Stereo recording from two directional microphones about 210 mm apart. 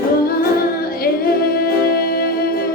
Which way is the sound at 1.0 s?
45° left (ahead or behind).